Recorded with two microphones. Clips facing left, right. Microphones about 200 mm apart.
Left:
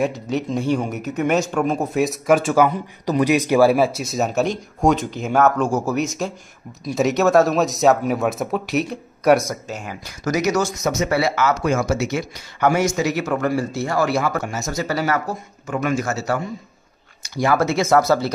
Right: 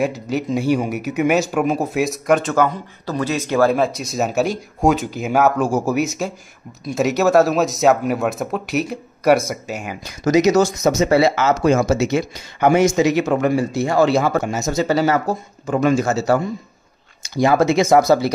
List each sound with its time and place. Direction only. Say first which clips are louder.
0.0 s speech: right 1 dB; 5° right (ahead or behind)